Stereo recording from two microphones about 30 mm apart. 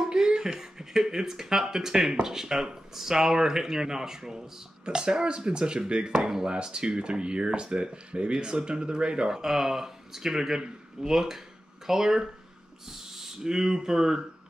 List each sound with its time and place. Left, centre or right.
0.1 s speech: right
4.8 s speech: right
6.1 s speech: centre
6.5 s speech: right
9.3 s speech: centre
12.8 s owl: centre
13.5 s speech: centre